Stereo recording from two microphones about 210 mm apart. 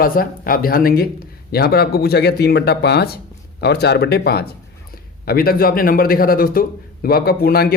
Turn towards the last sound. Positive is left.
turn(degrees=45)  # may be behind; listen again after turning